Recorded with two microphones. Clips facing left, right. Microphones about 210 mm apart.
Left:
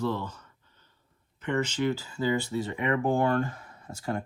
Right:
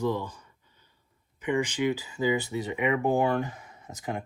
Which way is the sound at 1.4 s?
15° right (ahead or behind).